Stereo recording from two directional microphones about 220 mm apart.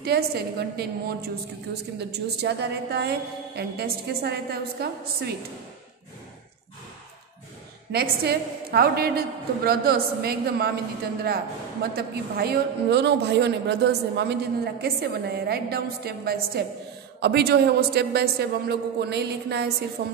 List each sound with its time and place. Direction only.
0.0 s a woman's voice: 45° right (ahead or behind)
7.9 s a woman's voice: 45° right (ahead or behind)
11.9 s a woman's voice: 45° right (ahead or behind)